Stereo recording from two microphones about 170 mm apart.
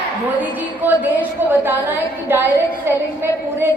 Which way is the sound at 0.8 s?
10° right (ahead or behind).